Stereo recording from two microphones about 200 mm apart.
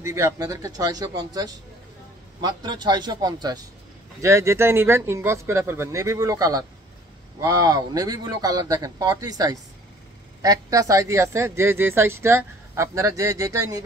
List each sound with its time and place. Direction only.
0.0 s speech: 15° right (ahead or behind)